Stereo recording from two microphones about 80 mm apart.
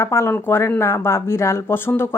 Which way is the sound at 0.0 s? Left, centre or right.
Left.